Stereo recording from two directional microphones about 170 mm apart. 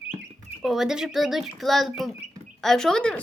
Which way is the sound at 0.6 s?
Centre (ahead or behind).